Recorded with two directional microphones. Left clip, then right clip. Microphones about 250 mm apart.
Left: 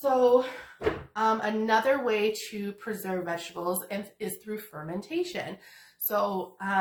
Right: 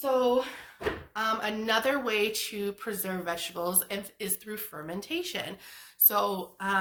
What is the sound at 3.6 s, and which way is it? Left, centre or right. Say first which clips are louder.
Speech: left 1 dB; right.